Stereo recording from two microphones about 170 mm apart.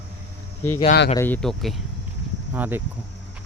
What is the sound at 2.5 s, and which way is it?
Speech, 10° right (ahead or behind).